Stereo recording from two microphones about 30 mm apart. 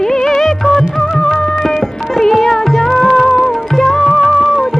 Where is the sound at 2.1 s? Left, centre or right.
Centre.